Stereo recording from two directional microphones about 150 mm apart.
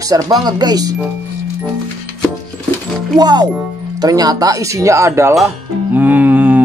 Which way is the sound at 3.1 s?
25° right (ahead or behind).